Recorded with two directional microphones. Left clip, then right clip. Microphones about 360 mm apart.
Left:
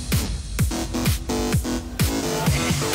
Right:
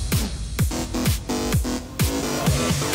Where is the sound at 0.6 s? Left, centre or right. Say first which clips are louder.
Even; centre.